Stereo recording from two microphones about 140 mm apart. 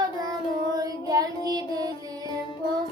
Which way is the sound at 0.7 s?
25° right (ahead or behind).